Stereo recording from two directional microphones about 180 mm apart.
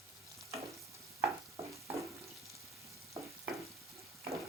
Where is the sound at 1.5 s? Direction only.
15° right (ahead or behind).